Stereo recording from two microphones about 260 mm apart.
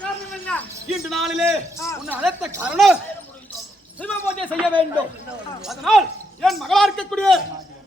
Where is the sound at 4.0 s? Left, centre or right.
Centre.